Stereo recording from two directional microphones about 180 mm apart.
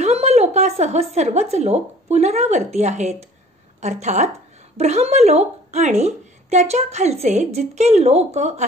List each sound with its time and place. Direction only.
0.0 s a woman's voice: 35° right (ahead or behind)